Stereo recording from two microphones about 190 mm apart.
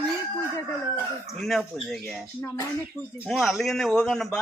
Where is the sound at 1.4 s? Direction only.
Centre (ahead or behind).